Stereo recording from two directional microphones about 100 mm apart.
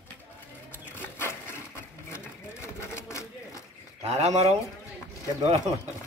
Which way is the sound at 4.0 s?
90° right.